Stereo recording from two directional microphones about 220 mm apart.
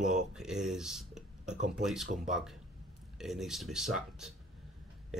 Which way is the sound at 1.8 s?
Centre (ahead or behind).